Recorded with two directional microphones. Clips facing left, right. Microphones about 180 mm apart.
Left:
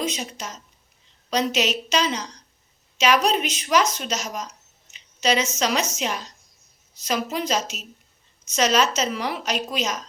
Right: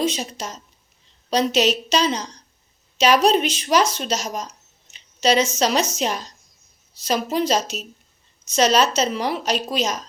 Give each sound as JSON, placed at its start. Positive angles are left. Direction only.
{"t": 0.0, "sound": "a woman's voice", "side_deg": -30}
{"t": 4.9, "sound": "a sound", "side_deg": -30}
{"t": 5.5, "sound": "a woman's voice", "side_deg": -30}